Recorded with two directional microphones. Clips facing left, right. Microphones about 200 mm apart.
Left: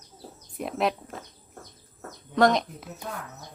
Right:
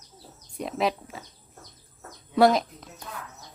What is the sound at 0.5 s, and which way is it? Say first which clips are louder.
Speech: even; centre (ahead or behind).